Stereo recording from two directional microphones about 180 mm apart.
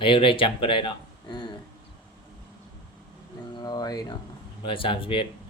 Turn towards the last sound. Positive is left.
turn(degrees=30)  # may be behind; listen again after turning